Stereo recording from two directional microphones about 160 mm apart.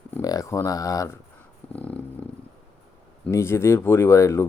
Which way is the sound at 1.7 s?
10° left (ahead or behind).